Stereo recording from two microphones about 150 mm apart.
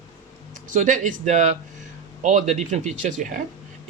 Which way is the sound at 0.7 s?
55° right (ahead or behind).